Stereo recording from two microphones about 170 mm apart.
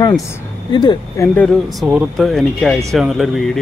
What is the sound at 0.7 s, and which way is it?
Speech, 20° left (ahead or behind).